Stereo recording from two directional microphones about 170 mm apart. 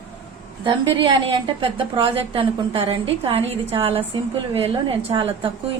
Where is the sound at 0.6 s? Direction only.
30° right (ahead or behind).